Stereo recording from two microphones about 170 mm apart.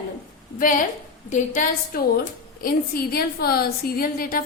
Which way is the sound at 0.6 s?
50° left (ahead or behind).